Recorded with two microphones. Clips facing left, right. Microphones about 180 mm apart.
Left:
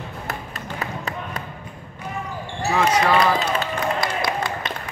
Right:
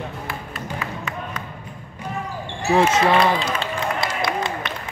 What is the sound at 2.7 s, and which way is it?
Speech, 30° right (ahead or behind).